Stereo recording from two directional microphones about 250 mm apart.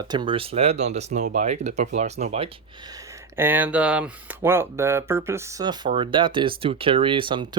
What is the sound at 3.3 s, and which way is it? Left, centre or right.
Speech, centre.